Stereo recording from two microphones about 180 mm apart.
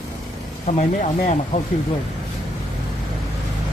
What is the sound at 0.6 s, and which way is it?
Speech, 40° left (ahead or behind).